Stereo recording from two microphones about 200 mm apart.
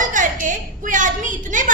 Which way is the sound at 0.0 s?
40° right (ahead or behind).